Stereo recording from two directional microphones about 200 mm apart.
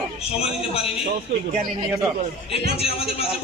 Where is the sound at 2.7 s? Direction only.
30° left (ahead or behind).